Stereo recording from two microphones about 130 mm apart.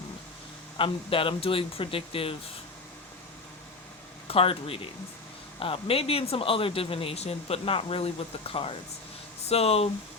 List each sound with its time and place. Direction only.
0.8 s speech: 40° left (ahead or behind)
4.3 s speech: 45° left (ahead or behind)